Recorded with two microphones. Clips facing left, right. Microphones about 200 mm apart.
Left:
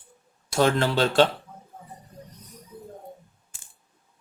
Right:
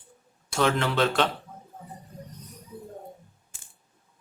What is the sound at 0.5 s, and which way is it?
Speech, 35° left (ahead or behind).